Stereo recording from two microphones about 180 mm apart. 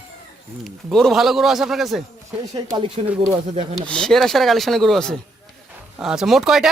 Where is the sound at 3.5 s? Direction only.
40° right (ahead or behind).